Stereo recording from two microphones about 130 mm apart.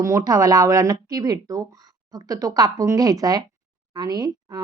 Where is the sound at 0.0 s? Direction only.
20° right (ahead or behind).